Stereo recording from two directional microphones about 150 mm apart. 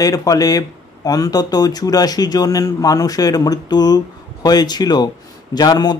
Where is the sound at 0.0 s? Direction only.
25° left (ahead or behind).